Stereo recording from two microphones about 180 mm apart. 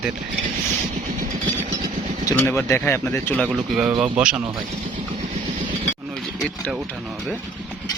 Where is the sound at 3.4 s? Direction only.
5° right (ahead or behind).